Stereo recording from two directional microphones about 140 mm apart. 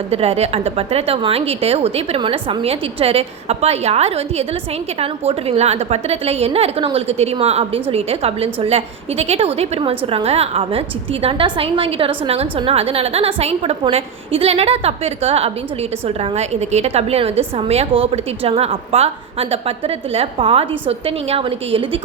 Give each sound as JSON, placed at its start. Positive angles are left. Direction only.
{"t": 0.1, "sound": "a woman's voice", "side_deg": -45}